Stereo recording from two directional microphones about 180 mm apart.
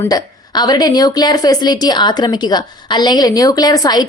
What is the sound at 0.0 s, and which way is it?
A woman's voice, 20° left (ahead or behind).